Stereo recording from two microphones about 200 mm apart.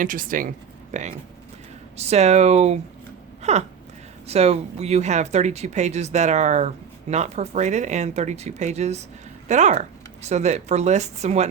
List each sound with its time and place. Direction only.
0.0 s speech: 40° right (ahead or behind)